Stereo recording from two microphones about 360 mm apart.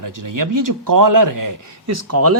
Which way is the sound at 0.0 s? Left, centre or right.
Right.